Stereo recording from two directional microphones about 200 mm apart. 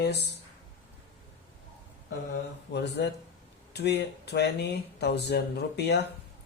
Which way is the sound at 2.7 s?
55° left (ahead or behind).